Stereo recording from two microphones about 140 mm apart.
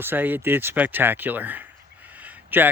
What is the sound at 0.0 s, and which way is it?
Speech, 15° right (ahead or behind).